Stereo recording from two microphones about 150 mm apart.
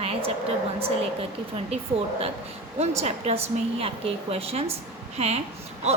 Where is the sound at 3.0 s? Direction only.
45° right (ahead or behind).